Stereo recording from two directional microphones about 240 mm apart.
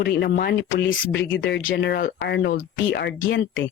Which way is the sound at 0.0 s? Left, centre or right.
Left.